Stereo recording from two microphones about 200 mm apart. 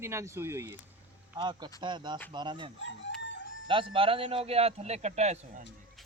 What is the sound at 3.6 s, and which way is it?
A man's voice, 25° right (ahead or behind).